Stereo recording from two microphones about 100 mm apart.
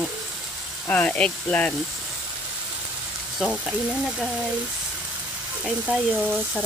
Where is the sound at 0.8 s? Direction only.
10° left (ahead or behind).